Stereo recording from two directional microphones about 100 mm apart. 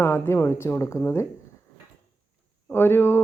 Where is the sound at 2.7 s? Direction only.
25° left (ahead or behind).